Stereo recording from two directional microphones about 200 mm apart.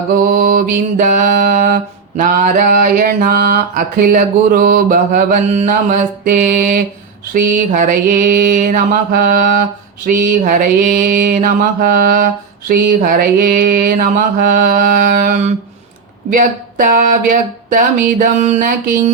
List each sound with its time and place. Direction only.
0.3 s mantra: 40° right (ahead or behind)